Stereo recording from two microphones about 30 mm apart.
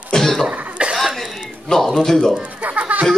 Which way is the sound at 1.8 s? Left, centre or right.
Centre.